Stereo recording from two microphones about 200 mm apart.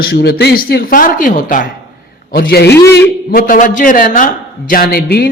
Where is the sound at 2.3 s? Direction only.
50° left (ahead or behind).